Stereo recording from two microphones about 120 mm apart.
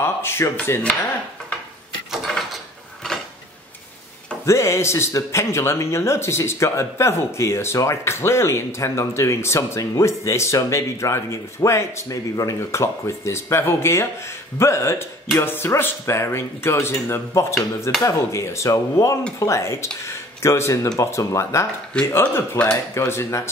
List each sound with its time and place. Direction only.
0.0 s speech: 20° left (ahead or behind)
2.2 s drawer open or close: centre (ahead or behind)
4.5 s speech: 20° left (ahead or behind)